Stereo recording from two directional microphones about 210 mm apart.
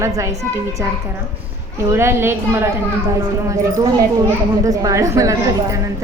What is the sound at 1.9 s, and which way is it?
A child's voice, 10° right (ahead or behind).